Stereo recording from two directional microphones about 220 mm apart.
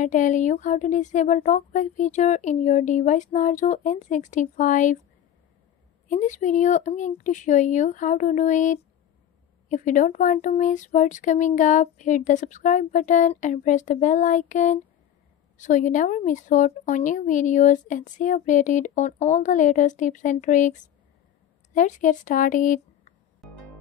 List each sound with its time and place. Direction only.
0.0 s speech: 35° left (ahead or behind)
6.0 s speech: 35° left (ahead or behind)
21.7 s a woman's voice: 35° left (ahead or behind)